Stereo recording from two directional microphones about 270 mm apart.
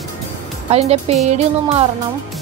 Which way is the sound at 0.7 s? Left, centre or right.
Right.